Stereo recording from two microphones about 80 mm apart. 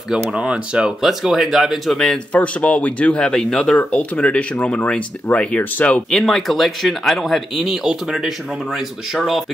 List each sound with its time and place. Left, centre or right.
0.3 s speech: centre
2.3 s speech: centre
3.7 s speech: centre
6.0 s speech: centre